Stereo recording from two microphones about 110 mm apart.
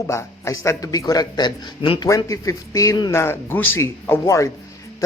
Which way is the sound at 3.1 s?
25° left (ahead or behind).